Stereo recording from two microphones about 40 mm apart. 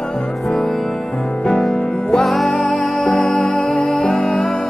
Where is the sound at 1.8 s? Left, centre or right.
Left.